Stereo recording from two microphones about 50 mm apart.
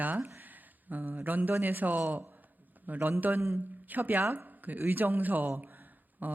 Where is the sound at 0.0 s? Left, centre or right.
Right.